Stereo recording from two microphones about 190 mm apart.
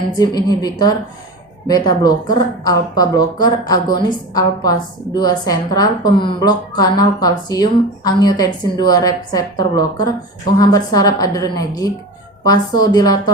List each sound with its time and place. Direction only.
0.2 s a woman's voice: 20° left (ahead or behind)